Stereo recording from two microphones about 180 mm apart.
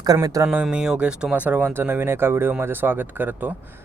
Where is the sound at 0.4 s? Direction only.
5° right (ahead or behind).